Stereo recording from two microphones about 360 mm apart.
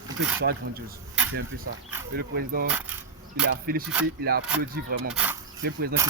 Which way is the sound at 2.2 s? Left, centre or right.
Right.